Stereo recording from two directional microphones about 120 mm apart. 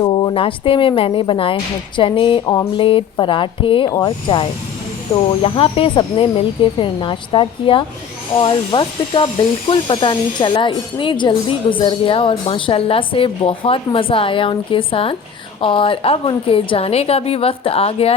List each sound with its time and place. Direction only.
0.0 s speech: 35° left (ahead or behind); by 18.1 s 55° left (ahead or behind)